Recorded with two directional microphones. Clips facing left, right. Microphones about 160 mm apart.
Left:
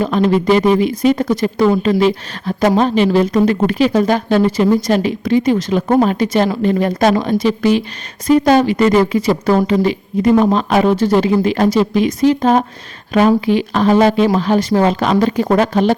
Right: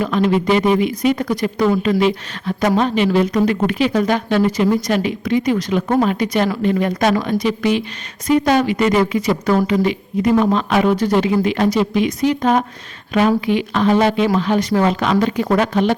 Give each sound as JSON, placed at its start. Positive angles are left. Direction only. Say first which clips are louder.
{"t": 0.0, "sound": "a woman's voice", "louder": "left 3 dB", "side_deg": 35}